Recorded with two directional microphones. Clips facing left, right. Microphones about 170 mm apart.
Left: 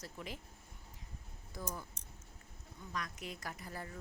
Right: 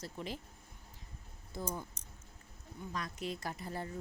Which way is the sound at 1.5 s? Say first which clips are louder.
Right 4 dB; 30° right (ahead or behind).